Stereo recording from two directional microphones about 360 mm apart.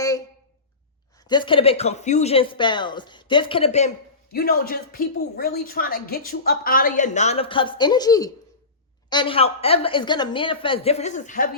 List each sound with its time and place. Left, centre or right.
1.3 s speech: centre